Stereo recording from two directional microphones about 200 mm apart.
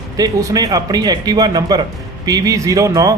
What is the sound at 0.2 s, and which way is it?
Speech, 20° right (ahead or behind).